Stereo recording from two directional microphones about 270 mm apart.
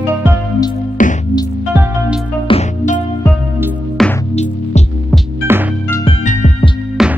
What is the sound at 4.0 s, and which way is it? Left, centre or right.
Music, centre.